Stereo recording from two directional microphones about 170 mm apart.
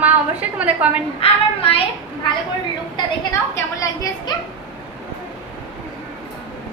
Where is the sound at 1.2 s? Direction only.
35° left (ahead or behind).